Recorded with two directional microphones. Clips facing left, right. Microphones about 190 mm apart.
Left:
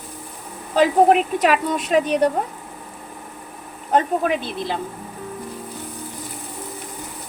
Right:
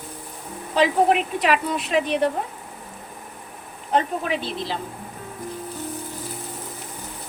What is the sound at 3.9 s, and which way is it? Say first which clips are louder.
Speech: left 4 dB; 50° left (ahead or behind).